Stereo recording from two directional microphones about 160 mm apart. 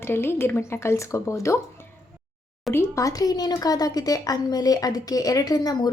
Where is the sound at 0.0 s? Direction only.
15° left (ahead or behind).